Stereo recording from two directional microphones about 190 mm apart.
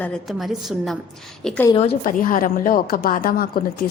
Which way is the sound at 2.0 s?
45° left (ahead or behind).